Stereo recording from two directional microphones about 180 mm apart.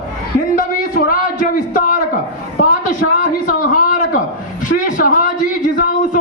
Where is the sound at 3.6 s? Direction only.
50° left (ahead or behind).